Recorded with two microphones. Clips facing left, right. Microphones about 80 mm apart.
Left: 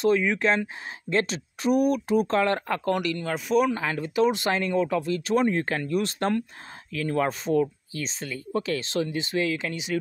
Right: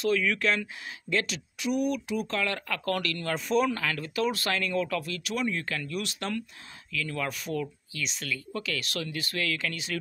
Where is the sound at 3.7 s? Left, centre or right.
Left.